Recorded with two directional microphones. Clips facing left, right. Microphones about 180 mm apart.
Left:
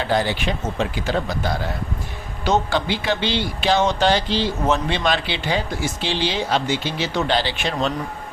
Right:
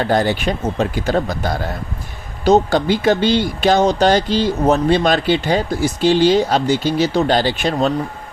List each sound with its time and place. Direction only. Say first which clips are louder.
0.0 s speech: right 5 dB; 45° right (ahead or behind)